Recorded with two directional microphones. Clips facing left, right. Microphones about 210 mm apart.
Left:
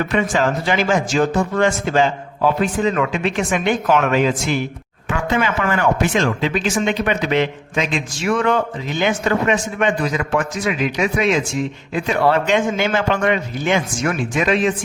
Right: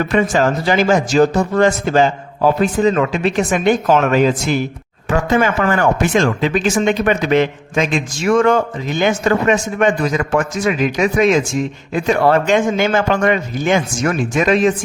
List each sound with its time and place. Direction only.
0.1 s a man's voice: 40° right (ahead or behind)